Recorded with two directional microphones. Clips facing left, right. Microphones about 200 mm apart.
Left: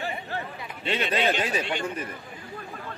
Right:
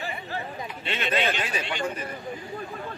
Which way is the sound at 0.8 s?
35° left (ahead or behind).